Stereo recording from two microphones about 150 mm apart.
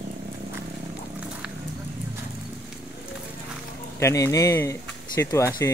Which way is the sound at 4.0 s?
20° left (ahead or behind).